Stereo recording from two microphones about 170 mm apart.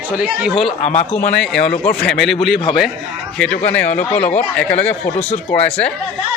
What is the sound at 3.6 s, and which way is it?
Speech, 10° left (ahead or behind).